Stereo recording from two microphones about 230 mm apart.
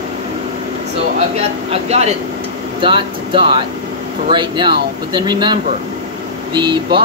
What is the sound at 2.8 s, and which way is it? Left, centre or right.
Speech, right.